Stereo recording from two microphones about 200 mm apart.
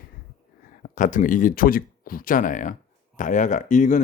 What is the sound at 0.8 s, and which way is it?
Speech, 40° left (ahead or behind).